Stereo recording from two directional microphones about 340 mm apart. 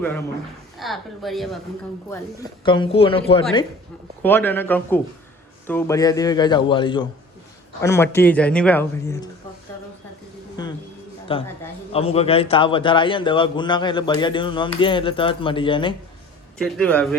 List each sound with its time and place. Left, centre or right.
0.8 s a woman's voice: centre
2.6 s a man's voice: centre
10.6 s a sound: centre
11.3 s a man's voice: centre
16.6 s a woman's voice: centre